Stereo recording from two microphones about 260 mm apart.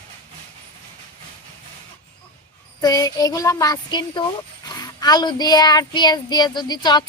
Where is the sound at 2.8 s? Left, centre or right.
Centre.